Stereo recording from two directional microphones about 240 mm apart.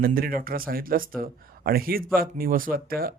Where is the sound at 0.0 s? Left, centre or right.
Right.